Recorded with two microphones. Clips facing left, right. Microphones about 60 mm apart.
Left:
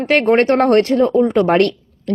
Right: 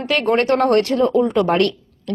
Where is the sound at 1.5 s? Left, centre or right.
Left.